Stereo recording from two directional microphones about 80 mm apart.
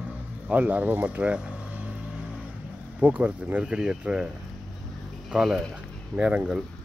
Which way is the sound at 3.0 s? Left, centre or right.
Centre.